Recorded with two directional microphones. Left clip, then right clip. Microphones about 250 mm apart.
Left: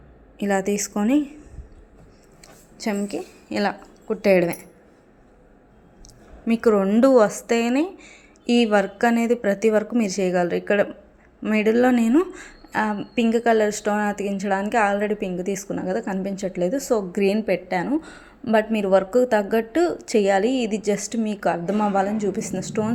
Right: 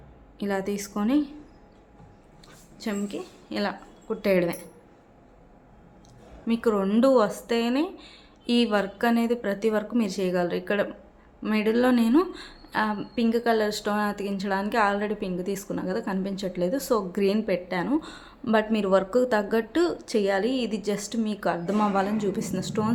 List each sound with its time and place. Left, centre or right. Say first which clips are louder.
0.4 s a woman's voice: left 6 dB; centre
2.8 s a woman's voice: left 5 dB; left
6.4 s a woman's voice: left 6 dB; centre